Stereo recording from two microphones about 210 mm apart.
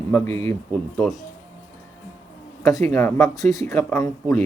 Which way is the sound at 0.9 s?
Centre (ahead or behind).